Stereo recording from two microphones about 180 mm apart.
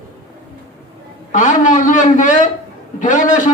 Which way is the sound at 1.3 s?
45° left (ahead or behind).